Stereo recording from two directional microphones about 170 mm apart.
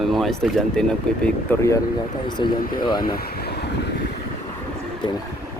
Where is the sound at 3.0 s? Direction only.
60° left (ahead or behind).